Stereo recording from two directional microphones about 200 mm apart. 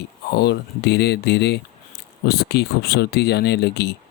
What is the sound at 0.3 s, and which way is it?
Speech, 55° left (ahead or behind).